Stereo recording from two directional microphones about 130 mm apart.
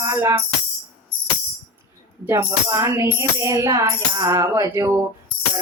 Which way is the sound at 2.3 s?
25° right (ahead or behind).